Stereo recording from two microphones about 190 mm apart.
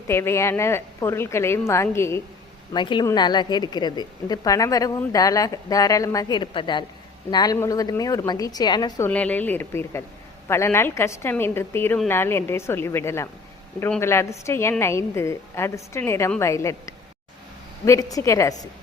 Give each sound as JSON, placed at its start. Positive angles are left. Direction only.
{"t": 0.1, "sound": "a woman's voice", "side_deg": 15}
{"t": 2.7, "sound": "a woman's voice", "side_deg": 25}
{"t": 9.0, "sound": "a woman's voice", "side_deg": 10}